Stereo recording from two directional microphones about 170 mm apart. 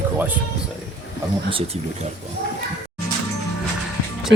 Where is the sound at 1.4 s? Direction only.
35° right (ahead or behind).